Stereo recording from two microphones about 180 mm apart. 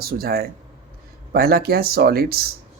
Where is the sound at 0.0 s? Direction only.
55° right (ahead or behind).